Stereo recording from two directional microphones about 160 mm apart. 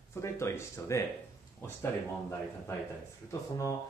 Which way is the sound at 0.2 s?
15° left (ahead or behind).